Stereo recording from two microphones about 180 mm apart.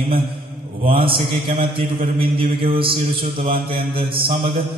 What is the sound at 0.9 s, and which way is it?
Mantra, 30° right (ahead or behind).